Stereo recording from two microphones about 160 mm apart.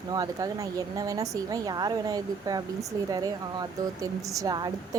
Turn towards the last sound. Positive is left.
turn(degrees=-25)  # may be behind; listen again after turning